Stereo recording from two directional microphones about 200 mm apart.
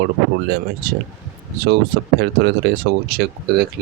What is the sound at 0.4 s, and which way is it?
Speech, 55° right (ahead or behind).